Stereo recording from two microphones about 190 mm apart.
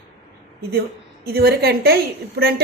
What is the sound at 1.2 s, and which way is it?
A woman's voice, 55° right (ahead or behind).